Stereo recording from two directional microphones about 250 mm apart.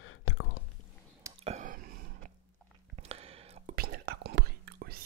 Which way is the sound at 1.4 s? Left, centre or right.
Right.